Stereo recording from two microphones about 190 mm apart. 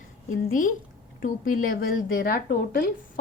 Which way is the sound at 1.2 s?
45° left (ahead or behind).